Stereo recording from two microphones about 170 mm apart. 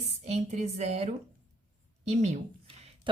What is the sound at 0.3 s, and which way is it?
Speech, 40° right (ahead or behind).